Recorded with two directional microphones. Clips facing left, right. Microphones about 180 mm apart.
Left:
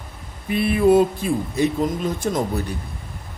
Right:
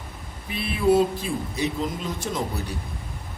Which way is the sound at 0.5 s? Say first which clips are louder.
Left 5 dB; 55° left (ahead or behind).